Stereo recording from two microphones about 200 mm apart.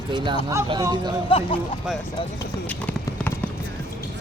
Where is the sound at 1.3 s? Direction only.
25° left (ahead or behind).